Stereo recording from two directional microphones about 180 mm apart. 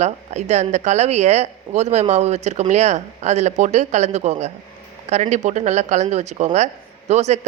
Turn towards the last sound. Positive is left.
turn(degrees=-40)  # may be behind; listen again after turning